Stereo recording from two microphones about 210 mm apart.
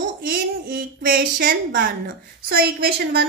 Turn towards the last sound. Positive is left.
turn(degrees=-50)  # may be behind; listen again after turning